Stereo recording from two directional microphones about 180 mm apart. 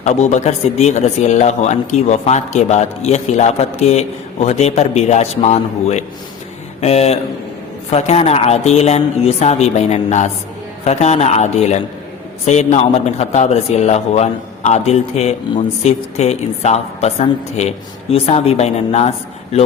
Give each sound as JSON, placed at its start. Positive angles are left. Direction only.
{"t": 0.0, "sound": "a man's voice", "side_deg": 40}